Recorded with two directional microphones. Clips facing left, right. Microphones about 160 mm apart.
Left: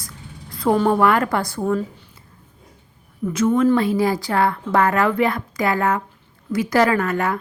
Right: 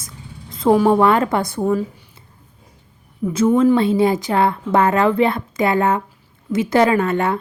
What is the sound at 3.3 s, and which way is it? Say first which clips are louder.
A woman's voice: right 3 dB; 30° right (ahead or behind).